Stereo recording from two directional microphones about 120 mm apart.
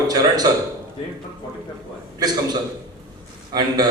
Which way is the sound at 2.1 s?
35° right (ahead or behind).